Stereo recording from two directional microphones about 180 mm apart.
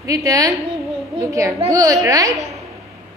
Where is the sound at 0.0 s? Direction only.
20° right (ahead or behind).